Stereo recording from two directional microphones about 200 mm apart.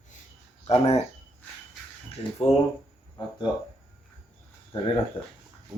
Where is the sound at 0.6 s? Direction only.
30° left (ahead or behind).